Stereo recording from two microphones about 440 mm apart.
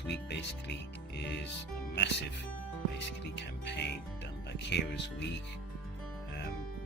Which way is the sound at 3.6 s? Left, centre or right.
Left.